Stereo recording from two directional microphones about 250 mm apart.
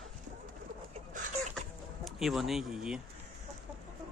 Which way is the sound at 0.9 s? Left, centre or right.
Right.